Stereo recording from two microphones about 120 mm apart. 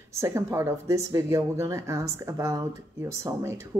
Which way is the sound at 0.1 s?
25° right (ahead or behind).